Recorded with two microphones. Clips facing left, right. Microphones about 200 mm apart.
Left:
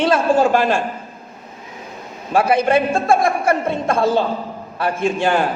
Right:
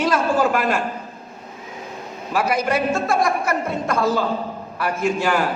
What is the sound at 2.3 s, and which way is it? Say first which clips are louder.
A man's voice: left 5 dB; 30° left (ahead or behind).